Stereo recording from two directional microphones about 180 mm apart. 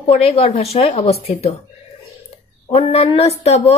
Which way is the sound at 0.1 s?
30° left (ahead or behind).